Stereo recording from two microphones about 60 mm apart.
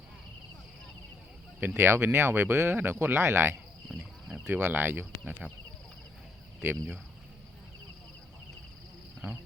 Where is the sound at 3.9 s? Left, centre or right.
Centre.